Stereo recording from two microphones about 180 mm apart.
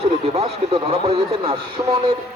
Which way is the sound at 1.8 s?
20° right (ahead or behind).